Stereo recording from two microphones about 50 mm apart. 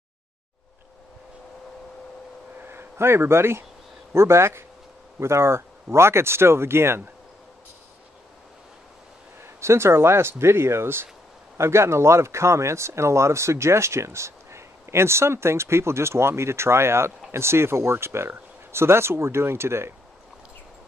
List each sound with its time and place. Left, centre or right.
2.6 s speech: right
9.4 s speech: right
11.5 s speech: right